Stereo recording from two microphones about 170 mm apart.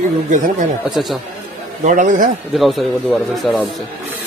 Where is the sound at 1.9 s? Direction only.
50° right (ahead or behind).